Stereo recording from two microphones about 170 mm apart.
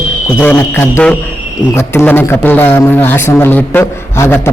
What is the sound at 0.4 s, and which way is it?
A man's voice, 10° left (ahead or behind).